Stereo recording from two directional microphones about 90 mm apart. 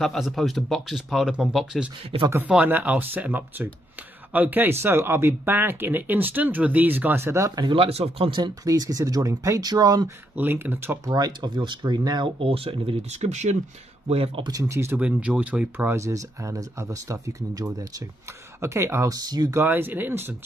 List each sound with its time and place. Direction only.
0.0 s speech: centre (ahead or behind)
2.4 s speech: 15° right (ahead or behind); by 7.6 s 35° right (ahead or behind)
7.6 s speech: 85° right; by 8.5 s 65° right (ahead or behind)
8.6 s speech: 40° right (ahead or behind)
10.3 s speech: 25° right (ahead or behind)
11.1 s speech: 45° right (ahead or behind)
12.4 s speech: 90° right
14.1 s speech: 80° right
14.5 s speech: 35° right (ahead or behind)
15.0 s speech: 15° right (ahead or behind)
15.9 s speech: 35° right (ahead or behind)
18.6 s speech: 30° right (ahead or behind)
19.1 s speech: 45° right (ahead or behind)
19.5 s speech: 25° right (ahead or behind)